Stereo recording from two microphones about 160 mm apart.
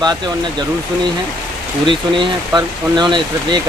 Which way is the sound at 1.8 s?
30° right (ahead or behind).